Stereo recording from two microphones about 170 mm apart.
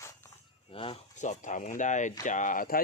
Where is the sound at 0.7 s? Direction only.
30° left (ahead or behind).